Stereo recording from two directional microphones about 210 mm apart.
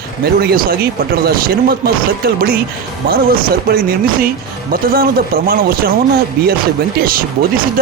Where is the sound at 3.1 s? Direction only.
45° right (ahead or behind).